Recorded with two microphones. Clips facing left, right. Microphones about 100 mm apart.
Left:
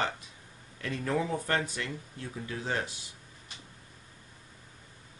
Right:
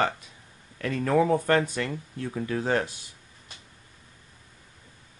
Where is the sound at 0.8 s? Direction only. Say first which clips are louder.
Right 8 dB; 70° right (ahead or behind).